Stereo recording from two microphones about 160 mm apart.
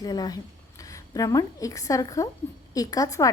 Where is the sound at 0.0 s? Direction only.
25° left (ahead or behind).